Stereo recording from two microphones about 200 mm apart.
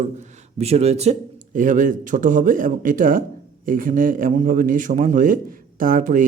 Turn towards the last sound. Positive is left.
turn(degrees=-40)  # may be behind; listen again after turning